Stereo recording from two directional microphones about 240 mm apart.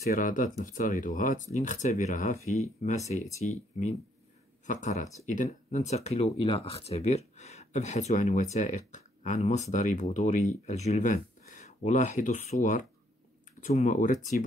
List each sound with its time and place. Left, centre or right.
0.1 s speech: left
13.6 s speech: left